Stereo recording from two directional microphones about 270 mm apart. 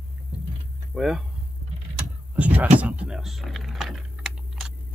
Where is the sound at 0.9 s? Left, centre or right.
Centre.